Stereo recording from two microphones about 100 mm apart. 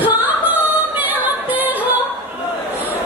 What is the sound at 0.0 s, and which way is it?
Singing, 20° right (ahead or behind).